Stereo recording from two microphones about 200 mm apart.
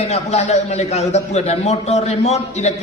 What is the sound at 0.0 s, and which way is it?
A man's voice, 30° left (ahead or behind).